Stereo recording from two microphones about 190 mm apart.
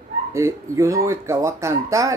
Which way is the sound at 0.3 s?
15° right (ahead or behind).